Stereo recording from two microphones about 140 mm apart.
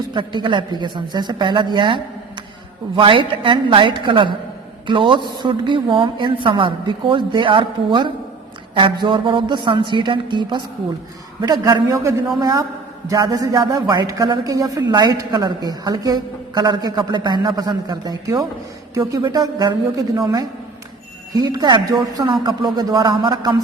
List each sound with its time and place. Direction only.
0.1 s a woman's voice: 35° right (ahead or behind)
11.6 s a man's voice: 25° right (ahead or behind)
21.3 s a man's voice: 30° right (ahead or behind)